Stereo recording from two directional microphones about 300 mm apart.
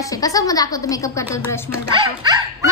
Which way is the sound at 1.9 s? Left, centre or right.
Centre.